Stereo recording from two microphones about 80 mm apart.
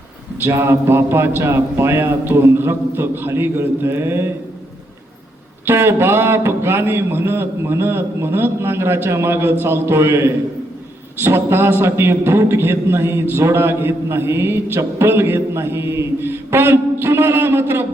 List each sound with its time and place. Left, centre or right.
0.4 s a man's voice: right
5.6 s a man's voice: right